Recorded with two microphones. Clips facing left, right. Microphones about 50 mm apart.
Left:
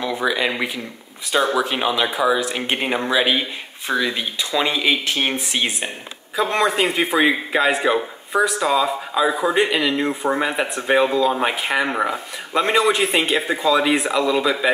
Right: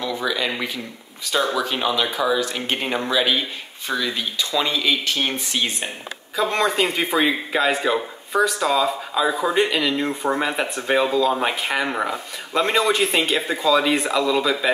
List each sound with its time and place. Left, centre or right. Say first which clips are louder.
0.0 s a man's voice: left 3 dB; centre
6.3 s a man's voice: left 1 dB; centre